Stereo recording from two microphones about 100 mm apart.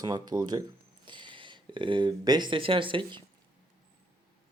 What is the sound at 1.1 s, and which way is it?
Speech, 55° right (ahead or behind).